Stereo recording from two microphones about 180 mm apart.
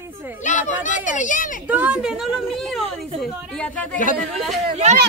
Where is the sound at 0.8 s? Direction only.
45° left (ahead or behind).